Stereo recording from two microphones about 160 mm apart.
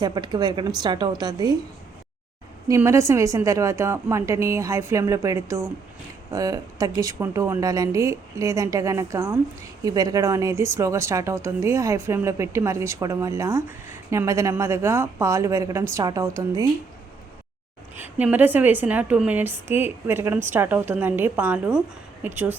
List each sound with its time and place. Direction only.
0.0 s speech: 25° right (ahead or behind)
2.6 s speech: 20° right (ahead or behind)
17.9 s a woman's voice: 10° right (ahead or behind)